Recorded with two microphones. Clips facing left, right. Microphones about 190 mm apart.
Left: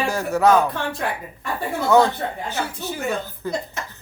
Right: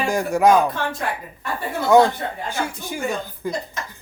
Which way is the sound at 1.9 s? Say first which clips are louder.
Right 2 dB; 15° right (ahead or behind).